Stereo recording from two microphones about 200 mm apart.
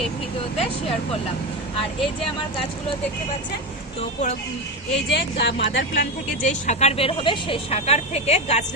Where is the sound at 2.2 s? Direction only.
25° left (ahead or behind).